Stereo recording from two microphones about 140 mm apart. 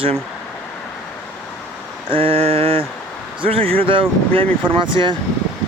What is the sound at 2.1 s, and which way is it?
Speech, 40° right (ahead or behind).